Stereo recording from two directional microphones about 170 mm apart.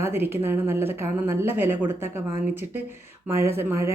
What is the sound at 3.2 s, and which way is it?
Speech, 15° right (ahead or behind).